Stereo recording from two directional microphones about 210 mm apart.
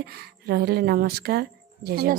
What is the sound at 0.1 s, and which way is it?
A woman's voice, 50° right (ahead or behind).